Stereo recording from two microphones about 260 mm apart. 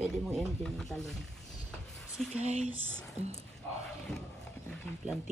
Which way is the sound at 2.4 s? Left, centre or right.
Right.